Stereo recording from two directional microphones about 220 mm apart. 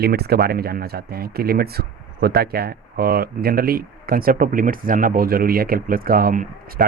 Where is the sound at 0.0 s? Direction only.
45° right (ahead or behind).